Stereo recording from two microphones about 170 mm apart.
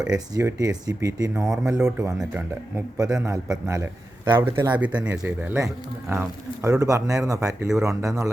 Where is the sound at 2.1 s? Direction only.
10° right (ahead or behind).